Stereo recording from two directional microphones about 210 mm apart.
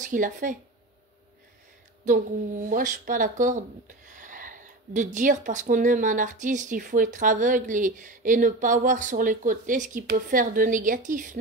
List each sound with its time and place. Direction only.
0.0 s speech: 40° right (ahead or behind)
2.0 s speech: 40° right (ahead or behind)